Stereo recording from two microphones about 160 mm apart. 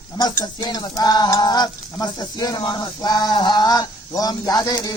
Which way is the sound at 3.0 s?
25° left (ahead or behind).